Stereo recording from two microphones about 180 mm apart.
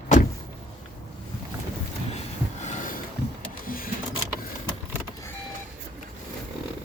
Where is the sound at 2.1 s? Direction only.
40° left (ahead or behind).